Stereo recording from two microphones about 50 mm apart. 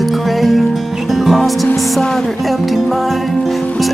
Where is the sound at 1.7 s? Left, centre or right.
Centre.